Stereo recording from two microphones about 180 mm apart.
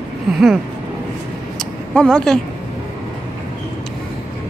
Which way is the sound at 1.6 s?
5° left (ahead or behind).